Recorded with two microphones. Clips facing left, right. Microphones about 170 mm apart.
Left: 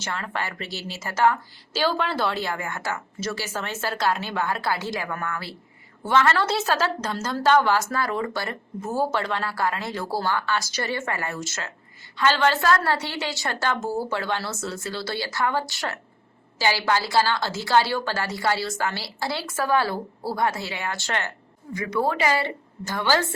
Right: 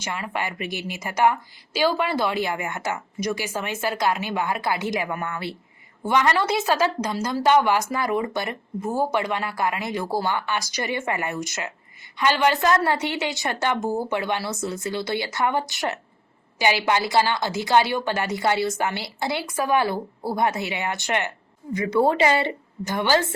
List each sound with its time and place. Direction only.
0.0 s a woman's voice: 15° right (ahead or behind)